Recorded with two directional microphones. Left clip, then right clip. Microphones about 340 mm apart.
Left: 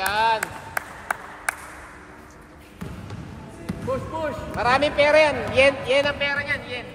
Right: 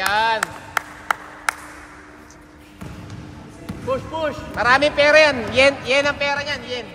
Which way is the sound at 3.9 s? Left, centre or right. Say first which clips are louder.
Right 4 dB; centre.